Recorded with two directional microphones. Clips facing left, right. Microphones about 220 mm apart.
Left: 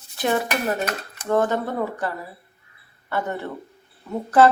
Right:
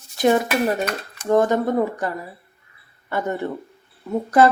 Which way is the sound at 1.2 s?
15° right (ahead or behind).